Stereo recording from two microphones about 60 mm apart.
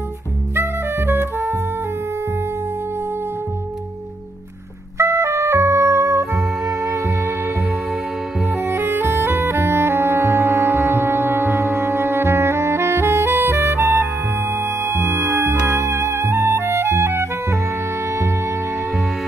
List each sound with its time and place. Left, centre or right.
0.6 s music: right
4.9 s music: right
8.5 s music: right